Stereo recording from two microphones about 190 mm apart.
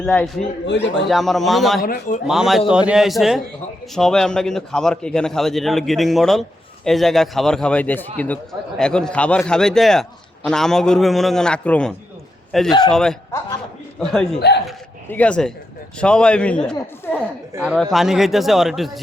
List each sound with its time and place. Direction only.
0.0 s a man's voice: 5° left (ahead or behind)
1.8 s a man's voice: 45° left (ahead or behind)
2.2 s a man's voice: 5° right (ahead or behind)
14.3 s speech: 60° left (ahead or behind)
15.1 s a man's voice: 5° left (ahead or behind)